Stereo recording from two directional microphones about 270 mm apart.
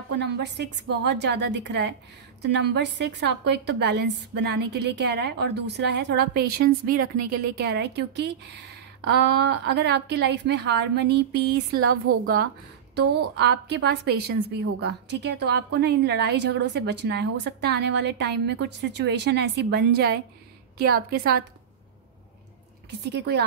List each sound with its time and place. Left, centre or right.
0.2 s a woman's voice: right
12.9 s a woman's voice: right
22.8 s a woman's voice: right